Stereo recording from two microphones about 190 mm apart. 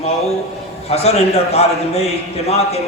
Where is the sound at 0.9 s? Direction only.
35° left (ahead or behind).